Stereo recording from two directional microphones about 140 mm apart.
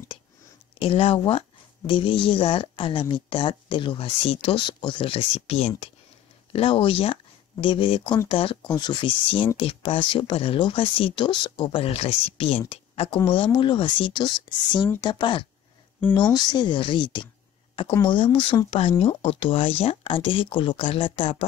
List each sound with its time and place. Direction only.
0.7 s speech: 40° left (ahead or behind)